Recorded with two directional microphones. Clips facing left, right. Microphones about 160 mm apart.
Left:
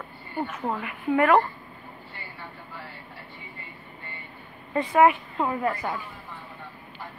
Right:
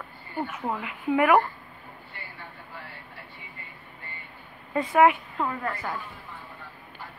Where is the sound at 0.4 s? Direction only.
5° right (ahead or behind).